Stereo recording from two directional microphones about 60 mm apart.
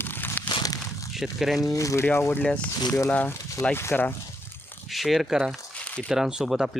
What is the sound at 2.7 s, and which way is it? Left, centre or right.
Speech, left.